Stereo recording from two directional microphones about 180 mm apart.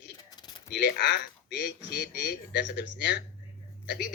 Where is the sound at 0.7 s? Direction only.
75° left (ahead or behind).